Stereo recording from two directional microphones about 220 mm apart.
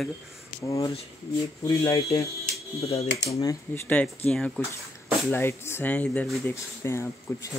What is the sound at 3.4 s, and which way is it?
Speech, 10° left (ahead or behind).